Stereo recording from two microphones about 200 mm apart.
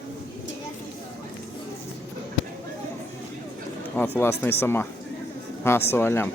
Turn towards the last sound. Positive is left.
turn(degrees=10)  # may be behind; listen again after turning